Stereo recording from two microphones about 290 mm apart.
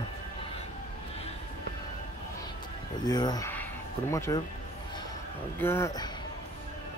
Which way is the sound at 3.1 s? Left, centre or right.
Centre.